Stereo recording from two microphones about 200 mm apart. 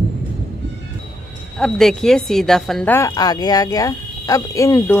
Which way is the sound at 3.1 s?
20° left (ahead or behind).